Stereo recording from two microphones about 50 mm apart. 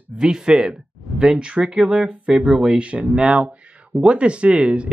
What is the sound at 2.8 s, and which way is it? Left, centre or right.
Speech, right.